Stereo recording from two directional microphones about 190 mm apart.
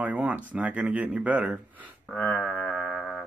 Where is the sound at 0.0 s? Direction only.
10° right (ahead or behind).